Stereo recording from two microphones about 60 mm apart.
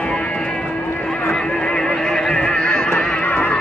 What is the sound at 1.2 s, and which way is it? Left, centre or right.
Horse, centre.